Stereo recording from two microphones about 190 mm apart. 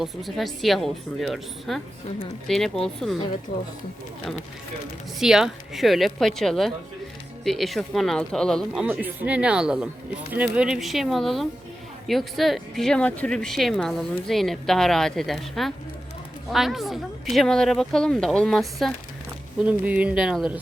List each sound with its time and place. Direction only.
0.0 s speech: centre (ahead or behind)
3.5 s speech: 55° left (ahead or behind)
5.2 s speech: 5° right (ahead or behind)